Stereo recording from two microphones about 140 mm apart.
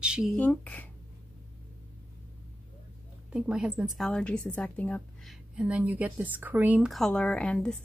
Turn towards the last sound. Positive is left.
turn(degrees=5)  # may be behind; listen again after turning